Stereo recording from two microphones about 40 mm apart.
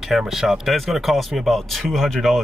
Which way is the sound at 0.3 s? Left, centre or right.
Centre.